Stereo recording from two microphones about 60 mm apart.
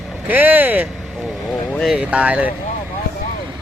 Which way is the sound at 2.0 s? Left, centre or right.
Right.